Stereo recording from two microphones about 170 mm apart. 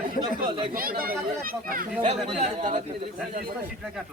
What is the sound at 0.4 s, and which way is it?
Speech, 30° right (ahead or behind).